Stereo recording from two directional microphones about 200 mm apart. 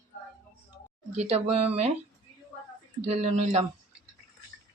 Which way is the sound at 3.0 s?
35° right (ahead or behind).